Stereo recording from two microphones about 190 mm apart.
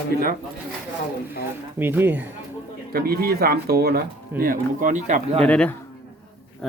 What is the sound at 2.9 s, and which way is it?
Speech, 55° right (ahead or behind).